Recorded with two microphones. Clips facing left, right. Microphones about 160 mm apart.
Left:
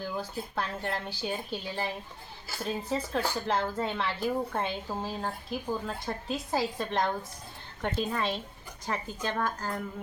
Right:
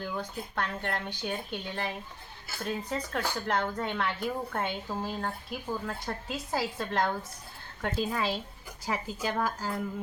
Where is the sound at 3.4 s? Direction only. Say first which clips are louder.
Left 1 dB; centre (ahead or behind).